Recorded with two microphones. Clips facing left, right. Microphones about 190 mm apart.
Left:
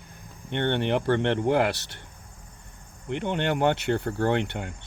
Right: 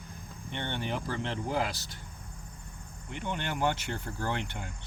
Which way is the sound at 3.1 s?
65° left (ahead or behind).